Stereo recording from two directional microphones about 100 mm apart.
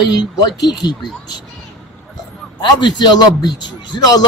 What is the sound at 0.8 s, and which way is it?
Speech, 45° left (ahead or behind).